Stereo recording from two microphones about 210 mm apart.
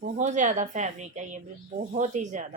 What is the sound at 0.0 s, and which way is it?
A woman's voice, 35° right (ahead or behind).